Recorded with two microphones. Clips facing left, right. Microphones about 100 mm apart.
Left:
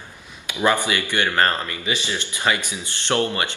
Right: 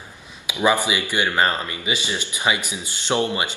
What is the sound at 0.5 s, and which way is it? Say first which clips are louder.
Speech: right 1 dB; 10° right (ahead or behind).